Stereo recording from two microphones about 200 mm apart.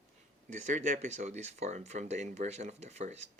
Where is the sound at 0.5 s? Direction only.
35° right (ahead or behind).